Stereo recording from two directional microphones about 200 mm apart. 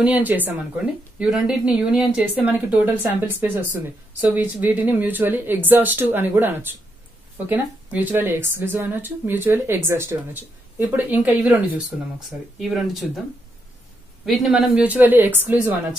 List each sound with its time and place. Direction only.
0.0 s speech: 10° right (ahead or behind)
14.2 s speech: centre (ahead or behind)